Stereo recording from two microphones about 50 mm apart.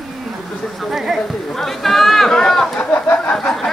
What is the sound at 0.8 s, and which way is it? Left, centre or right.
Speech, centre.